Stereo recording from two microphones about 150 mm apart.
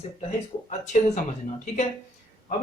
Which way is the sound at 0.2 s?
50° left (ahead or behind).